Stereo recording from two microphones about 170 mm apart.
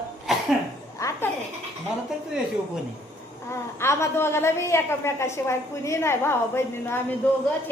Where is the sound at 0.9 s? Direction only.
20° left (ahead or behind).